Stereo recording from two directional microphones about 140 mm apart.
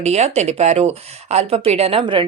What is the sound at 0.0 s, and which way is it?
Speech, 50° right (ahead or behind).